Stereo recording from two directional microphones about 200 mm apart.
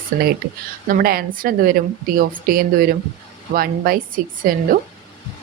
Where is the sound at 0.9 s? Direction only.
45° right (ahead or behind).